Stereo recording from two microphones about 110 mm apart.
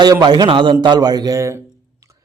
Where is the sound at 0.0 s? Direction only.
40° right (ahead or behind).